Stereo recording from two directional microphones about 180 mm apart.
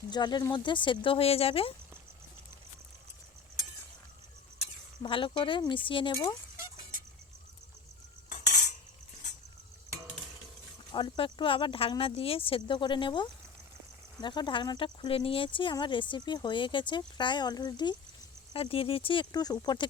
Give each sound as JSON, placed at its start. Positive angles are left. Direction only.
{"t": 0.1, "sound": "speech", "side_deg": 25}
{"t": 5.0, "sound": "speech", "side_deg": 30}
{"t": 8.3, "sound": "cutlery", "side_deg": 45}
{"t": 10.9, "sound": "speech", "side_deg": 25}